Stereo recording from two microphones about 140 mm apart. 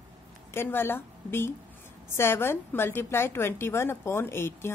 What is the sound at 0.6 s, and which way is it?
A woman's voice, 15° left (ahead or behind).